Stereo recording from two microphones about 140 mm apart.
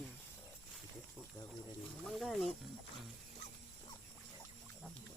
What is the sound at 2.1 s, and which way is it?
Speech, centre (ahead or behind).